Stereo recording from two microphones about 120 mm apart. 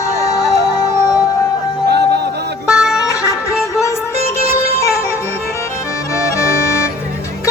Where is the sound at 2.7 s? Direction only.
5° right (ahead or behind).